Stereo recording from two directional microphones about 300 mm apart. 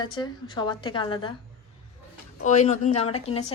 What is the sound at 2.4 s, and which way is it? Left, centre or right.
A woman's voice, left.